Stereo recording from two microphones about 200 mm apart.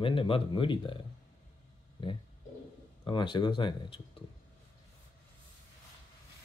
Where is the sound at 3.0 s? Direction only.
25° left (ahead or behind).